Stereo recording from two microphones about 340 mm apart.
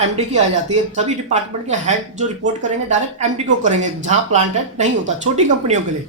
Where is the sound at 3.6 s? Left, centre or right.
Right.